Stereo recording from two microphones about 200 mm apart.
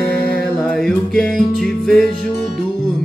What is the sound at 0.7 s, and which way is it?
Music, 5° left (ahead or behind).